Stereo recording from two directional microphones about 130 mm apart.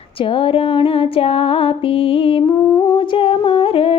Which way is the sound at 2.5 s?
30° left (ahead or behind).